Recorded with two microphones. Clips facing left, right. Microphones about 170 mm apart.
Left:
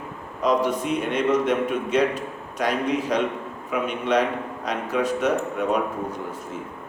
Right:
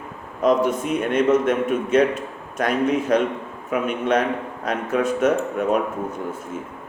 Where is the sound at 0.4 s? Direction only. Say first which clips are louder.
Right 3 dB; 50° right (ahead or behind).